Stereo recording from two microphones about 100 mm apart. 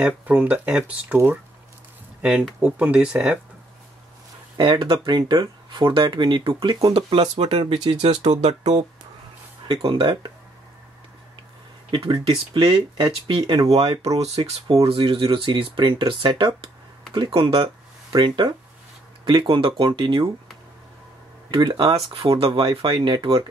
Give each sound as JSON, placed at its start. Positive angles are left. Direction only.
{"t": 0.0, "sound": "speech", "side_deg": -15}
{"t": 2.6, "sound": "speech", "side_deg": -10}
{"t": 4.6, "sound": "speech", "side_deg": -65}
{"t": 7.9, "sound": "speech", "side_deg": -85}
{"t": 9.8, "sound": "speech", "side_deg": -65}
{"t": 11.9, "sound": "speech", "side_deg": -65}
{"t": 13.7, "sound": "speech", "side_deg": -75}
{"t": 14.8, "sound": "speech", "side_deg": -70}
{"t": 17.3, "sound": "speech", "side_deg": -70}
{"t": 18.1, "sound": "speech", "side_deg": -55}
{"t": 21.5, "sound": "speech", "side_deg": -50}
{"t": 21.9, "sound": "speech", "side_deg": -75}
{"t": 22.5, "sound": "speech", "side_deg": -50}